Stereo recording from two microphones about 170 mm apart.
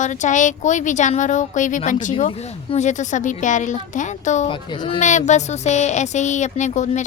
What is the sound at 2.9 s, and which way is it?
A woman's voice, 45° left (ahead or behind).